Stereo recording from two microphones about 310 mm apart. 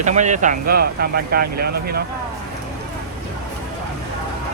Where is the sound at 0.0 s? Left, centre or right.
Right.